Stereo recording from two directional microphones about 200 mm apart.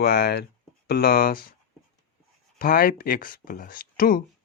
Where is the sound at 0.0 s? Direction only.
50° left (ahead or behind).